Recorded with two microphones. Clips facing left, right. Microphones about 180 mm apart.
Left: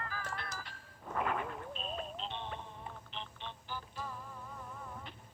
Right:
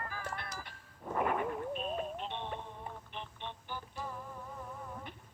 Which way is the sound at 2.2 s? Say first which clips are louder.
Right 2 dB; 15° right (ahead or behind).